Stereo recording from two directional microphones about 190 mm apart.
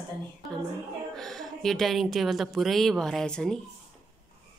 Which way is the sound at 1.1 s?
5° left (ahead or behind).